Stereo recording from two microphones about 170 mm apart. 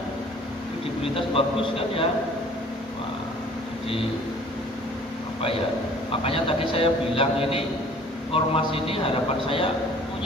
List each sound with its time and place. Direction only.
1.1 s a man's voice: 30° left (ahead or behind)
5.4 s a man's voice: 35° left (ahead or behind)